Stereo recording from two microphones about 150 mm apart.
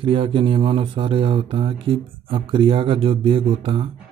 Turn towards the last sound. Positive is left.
turn(degrees=-35)  # may be behind; listen again after turning